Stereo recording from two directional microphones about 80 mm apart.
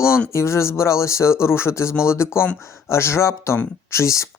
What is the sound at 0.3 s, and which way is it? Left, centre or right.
Speech, left.